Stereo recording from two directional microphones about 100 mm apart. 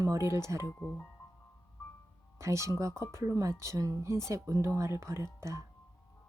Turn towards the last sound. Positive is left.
turn(degrees=-30)  # may be behind; listen again after turning